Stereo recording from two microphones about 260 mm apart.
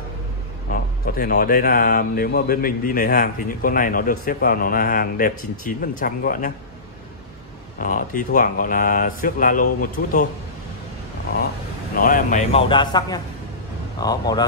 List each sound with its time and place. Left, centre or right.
0.7 s speech: left
7.8 s speech: left
11.9 s a man's voice: left; by 14.4 s centre